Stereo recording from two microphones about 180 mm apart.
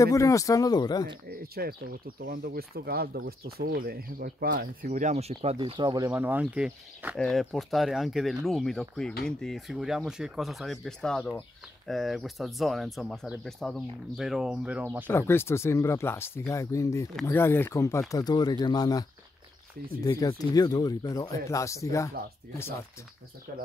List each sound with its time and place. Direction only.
0.0 s speech: 20° left (ahead or behind)
1.3 s speech: 55° right (ahead or behind); by 15.0 s 10° right (ahead or behind)
15.0 s speech: 15° left (ahead or behind)
17.1 s speech: 5° left (ahead or behind)
17.4 s speech: 15° left (ahead or behind)
20.1 s speech: 20° left (ahead or behind)